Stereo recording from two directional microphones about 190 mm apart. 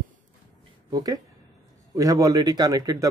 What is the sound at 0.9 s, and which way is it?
Speech, 20° right (ahead or behind).